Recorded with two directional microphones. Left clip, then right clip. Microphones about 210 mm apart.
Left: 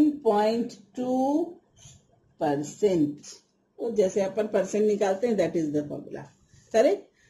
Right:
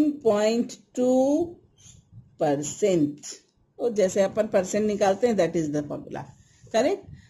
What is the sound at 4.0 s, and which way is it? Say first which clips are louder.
Speech: right 2 dB; 45° right (ahead or behind).